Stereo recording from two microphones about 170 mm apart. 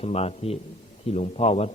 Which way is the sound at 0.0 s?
35° left (ahead or behind).